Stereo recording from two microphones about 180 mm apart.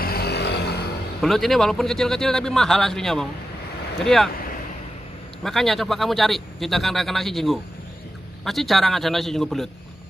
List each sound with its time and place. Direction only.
0.0 s a sound: 60° left (ahead or behind)
1.2 s speech: centre (ahead or behind)
5.4 s speech: centre (ahead or behind)